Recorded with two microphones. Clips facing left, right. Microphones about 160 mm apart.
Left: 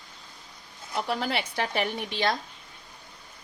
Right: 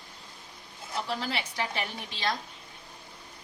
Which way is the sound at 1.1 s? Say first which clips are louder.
Left 5 dB; 60° left (ahead or behind).